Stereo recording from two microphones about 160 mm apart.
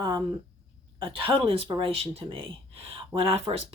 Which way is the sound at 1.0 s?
35° right (ahead or behind).